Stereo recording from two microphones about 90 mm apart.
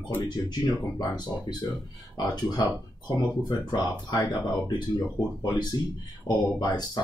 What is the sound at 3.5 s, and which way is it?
Speech, 50° left (ahead or behind).